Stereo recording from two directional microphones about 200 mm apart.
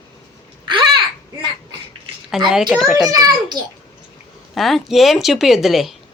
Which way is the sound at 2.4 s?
Centre (ahead or behind).